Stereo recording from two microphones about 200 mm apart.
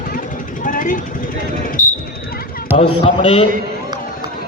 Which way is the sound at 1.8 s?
40° left (ahead or behind).